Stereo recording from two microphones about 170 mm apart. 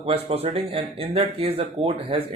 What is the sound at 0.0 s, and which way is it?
Speech, 35° right (ahead or behind).